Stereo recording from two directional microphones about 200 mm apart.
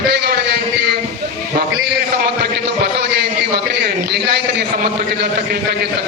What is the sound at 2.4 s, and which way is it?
A man's voice, 55° right (ahead or behind).